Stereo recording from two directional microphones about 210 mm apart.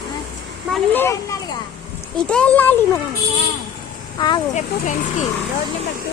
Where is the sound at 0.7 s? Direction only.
10° left (ahead or behind).